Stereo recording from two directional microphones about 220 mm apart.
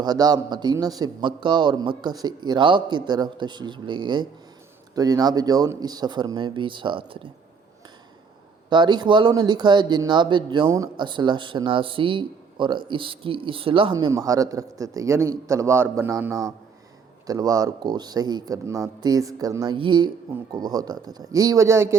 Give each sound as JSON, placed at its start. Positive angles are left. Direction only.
{"t": 0.0, "sound": "speech", "side_deg": -20}
{"t": 8.7, "sound": "speech", "side_deg": -20}